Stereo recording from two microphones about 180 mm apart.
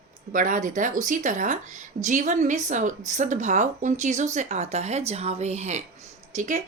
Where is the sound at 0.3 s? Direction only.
45° right (ahead or behind).